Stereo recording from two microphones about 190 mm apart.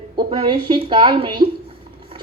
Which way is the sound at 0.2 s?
25° right (ahead or behind).